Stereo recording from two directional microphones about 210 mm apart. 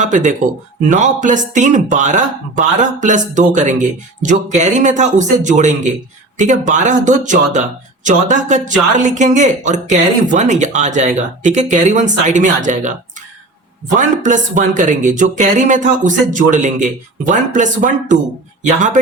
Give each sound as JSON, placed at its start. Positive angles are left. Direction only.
{"t": 0.0, "sound": "speech", "side_deg": -35}
{"t": 13.9, "sound": "speech", "side_deg": -35}